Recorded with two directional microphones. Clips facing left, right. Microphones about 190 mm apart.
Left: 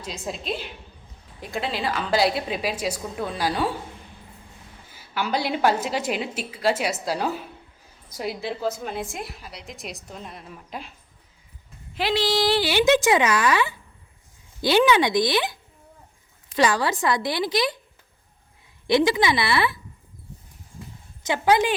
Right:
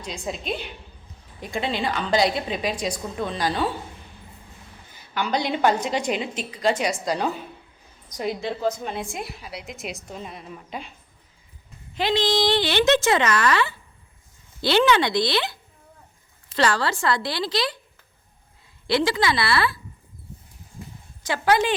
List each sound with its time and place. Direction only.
0.0 s a woman's voice: centre (ahead or behind)
4.9 s a woman's voice: 5° left (ahead or behind)
11.9 s a woman's voice: 5° left (ahead or behind)
18.9 s a woman's voice: 20° left (ahead or behind)
21.2 s a woman's voice: 15° left (ahead or behind)